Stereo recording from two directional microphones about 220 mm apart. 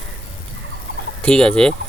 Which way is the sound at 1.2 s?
5° left (ahead or behind).